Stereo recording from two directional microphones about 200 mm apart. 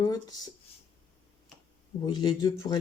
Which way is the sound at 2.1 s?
20° left (ahead or behind).